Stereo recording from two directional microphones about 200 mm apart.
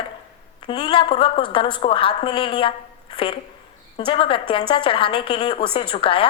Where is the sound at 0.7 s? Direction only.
25° left (ahead or behind).